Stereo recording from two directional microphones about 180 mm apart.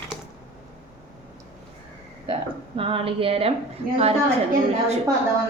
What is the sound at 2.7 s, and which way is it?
Speech, 30° right (ahead or behind).